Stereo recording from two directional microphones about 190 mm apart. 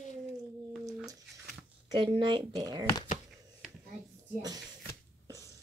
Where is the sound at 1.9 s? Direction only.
25° right (ahead or behind).